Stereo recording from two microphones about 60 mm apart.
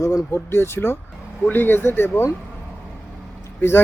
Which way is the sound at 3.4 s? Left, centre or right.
Left.